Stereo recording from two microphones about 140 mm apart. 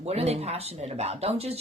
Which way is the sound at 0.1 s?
50° right (ahead or behind).